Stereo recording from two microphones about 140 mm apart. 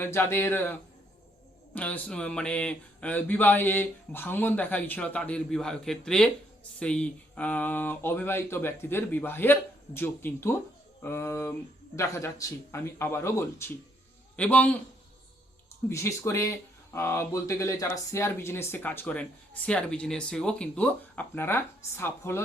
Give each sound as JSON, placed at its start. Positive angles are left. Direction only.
{"t": 0.0, "sound": "a man's voice", "side_deg": 15}
{"t": 15.9, "sound": "speech", "side_deg": 20}